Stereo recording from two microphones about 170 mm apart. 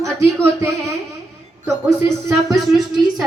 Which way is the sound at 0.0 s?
15° right (ahead or behind).